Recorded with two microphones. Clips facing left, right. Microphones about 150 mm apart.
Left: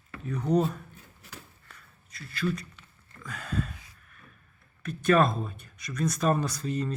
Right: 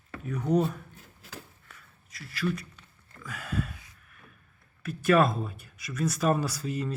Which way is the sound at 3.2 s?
5° right (ahead or behind).